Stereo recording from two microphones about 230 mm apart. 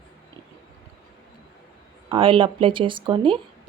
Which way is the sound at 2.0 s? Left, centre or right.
Right.